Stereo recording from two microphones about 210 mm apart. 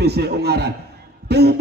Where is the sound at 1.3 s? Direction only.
50° right (ahead or behind).